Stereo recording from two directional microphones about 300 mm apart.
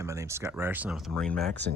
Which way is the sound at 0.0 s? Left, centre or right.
Centre.